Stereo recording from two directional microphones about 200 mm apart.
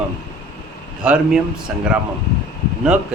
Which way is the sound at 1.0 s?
5° right (ahead or behind).